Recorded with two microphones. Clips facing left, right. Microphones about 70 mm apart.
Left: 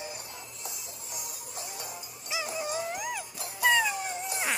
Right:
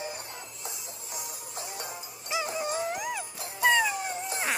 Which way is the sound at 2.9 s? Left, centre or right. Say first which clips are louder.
Right 2 dB; right.